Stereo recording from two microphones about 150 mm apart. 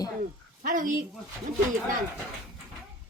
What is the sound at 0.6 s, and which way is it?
Speech, 60° right (ahead or behind).